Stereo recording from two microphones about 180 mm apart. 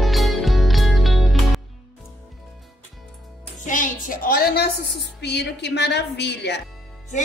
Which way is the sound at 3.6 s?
50° left (ahead or behind).